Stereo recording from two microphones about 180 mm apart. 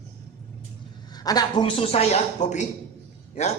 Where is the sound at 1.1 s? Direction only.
20° left (ahead or behind); by 2.7 s 40° left (ahead or behind).